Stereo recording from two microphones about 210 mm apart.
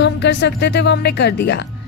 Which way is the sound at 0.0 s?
55° left (ahead or behind).